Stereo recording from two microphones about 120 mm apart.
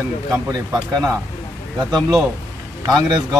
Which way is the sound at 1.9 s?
35° right (ahead or behind).